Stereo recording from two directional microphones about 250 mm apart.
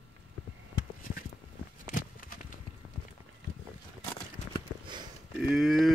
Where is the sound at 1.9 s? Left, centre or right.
Left.